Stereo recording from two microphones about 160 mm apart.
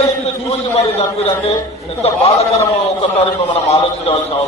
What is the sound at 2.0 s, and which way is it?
Speech, 40° left (ahead or behind).